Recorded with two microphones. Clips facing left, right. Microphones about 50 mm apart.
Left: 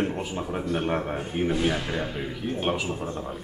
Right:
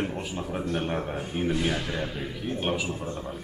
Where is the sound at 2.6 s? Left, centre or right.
Centre.